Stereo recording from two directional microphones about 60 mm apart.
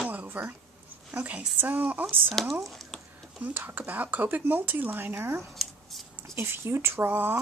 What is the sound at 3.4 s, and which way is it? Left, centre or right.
Speech, right.